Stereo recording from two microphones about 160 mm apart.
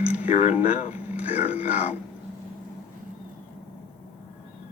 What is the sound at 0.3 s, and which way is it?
Speech, 45° left (ahead or behind).